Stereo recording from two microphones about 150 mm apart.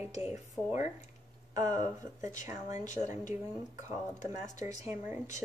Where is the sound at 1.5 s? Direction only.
20° right (ahead or behind).